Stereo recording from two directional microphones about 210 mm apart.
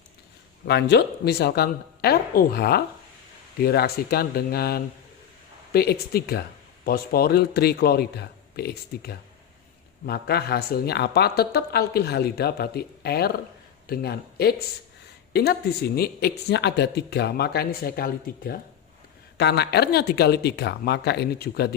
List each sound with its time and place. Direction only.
0.7 s a man's voice: 50° left (ahead or behind)